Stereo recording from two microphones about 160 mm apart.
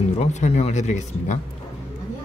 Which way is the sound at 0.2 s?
45° left (ahead or behind).